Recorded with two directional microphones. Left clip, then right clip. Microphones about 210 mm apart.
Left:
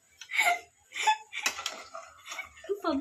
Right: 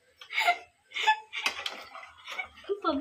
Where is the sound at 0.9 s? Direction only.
20° left (ahead or behind).